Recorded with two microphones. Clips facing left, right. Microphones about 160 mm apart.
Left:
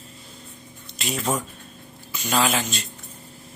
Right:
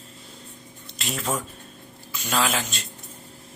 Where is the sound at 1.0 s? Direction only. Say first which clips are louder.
Left 3 dB; centre (ahead or behind).